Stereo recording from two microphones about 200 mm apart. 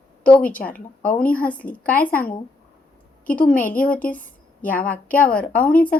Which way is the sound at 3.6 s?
45° left (ahead or behind).